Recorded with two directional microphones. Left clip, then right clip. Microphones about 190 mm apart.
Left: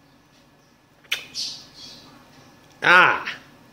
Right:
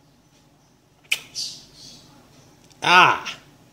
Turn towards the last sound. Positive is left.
turn(degrees=-25)  # may be behind; listen again after turning